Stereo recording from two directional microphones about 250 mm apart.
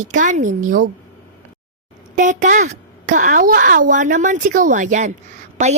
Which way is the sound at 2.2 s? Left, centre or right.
Right.